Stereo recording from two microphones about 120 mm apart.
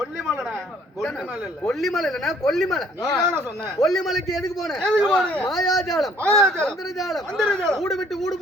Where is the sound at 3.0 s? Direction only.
35° left (ahead or behind).